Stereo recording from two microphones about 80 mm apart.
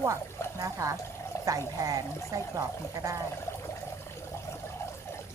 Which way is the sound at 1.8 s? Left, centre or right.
Right.